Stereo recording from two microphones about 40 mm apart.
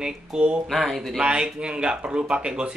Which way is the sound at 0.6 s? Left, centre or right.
Centre.